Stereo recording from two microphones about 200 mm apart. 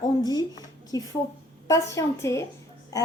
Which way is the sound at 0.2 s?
20° left (ahead or behind).